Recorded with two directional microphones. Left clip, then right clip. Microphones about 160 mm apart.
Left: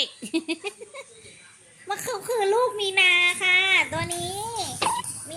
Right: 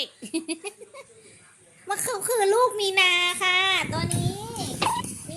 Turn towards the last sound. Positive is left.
turn(degrees=0)  # may be behind; listen again after turning